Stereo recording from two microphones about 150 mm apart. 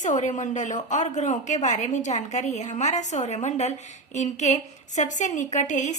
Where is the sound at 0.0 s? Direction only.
50° left (ahead or behind).